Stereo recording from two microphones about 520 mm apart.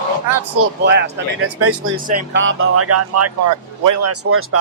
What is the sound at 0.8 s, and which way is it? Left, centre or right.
Speech, centre.